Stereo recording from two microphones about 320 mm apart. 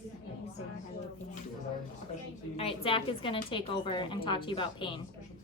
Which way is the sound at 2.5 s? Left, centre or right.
Centre.